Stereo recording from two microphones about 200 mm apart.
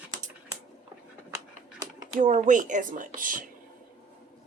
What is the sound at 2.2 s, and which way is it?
Speech, 40° right (ahead or behind).